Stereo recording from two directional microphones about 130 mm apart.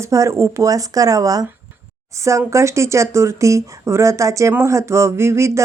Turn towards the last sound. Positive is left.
turn(degrees=-20)  # may be behind; listen again after turning